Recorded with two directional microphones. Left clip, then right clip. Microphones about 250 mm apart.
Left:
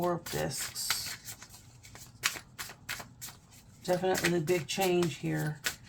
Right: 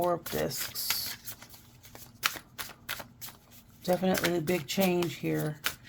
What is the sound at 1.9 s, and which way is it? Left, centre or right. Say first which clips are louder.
Shuffling cards: right 2 dB; right.